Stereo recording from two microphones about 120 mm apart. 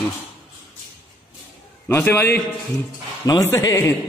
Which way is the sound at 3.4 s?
25° left (ahead or behind).